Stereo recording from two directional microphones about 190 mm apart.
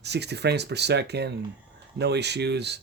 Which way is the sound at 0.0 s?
60° right (ahead or behind).